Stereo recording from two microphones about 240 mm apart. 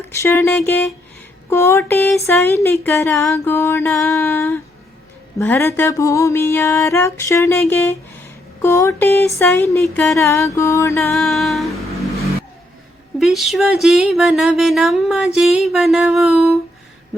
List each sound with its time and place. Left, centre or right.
0.1 s a sound: centre
11.1 s speech: centre
13.1 s speech: centre